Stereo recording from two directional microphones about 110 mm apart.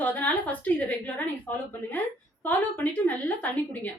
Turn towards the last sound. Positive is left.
turn(degrees=15)  # may be behind; listen again after turning